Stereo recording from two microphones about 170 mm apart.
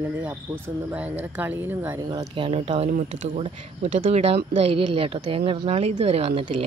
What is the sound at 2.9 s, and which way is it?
Speech, 50° right (ahead or behind).